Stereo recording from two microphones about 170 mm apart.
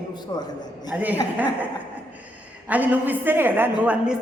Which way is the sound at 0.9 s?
10° right (ahead or behind).